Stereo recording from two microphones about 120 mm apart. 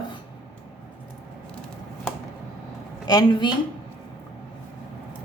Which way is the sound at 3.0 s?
35° left (ahead or behind).